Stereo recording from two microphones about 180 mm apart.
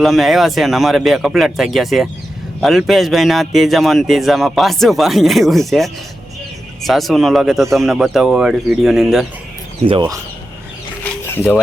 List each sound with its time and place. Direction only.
0.0 s speech: centre (ahead or behind)
9.8 s speech: 25° right (ahead or behind)
11.0 s a sound: 15° left (ahead or behind)